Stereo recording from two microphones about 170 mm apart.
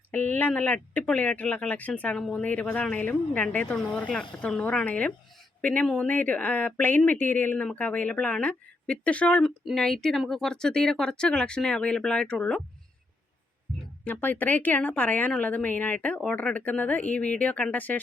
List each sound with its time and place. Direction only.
0.1 s speech: 10° left (ahead or behind)
13.7 s a sound: 60° right (ahead or behind)
14.0 s speech: 10° left (ahead or behind)